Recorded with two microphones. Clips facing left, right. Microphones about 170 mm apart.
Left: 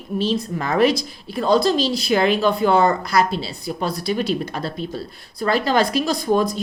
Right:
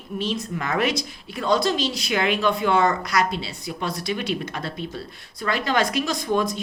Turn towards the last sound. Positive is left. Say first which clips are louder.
# left 4 dB
turn(degrees=35)  # may be behind; listen again after turning